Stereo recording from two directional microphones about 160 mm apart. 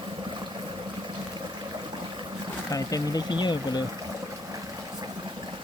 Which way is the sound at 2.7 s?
25° left (ahead or behind).